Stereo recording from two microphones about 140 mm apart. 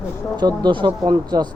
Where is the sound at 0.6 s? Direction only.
35° right (ahead or behind).